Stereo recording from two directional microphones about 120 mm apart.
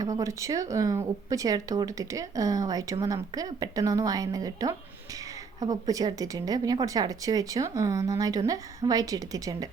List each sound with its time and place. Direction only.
0.0 s a woman's voice: 25° right (ahead or behind)